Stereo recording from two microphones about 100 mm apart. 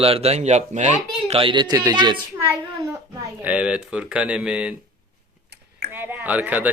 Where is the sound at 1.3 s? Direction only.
70° right (ahead or behind).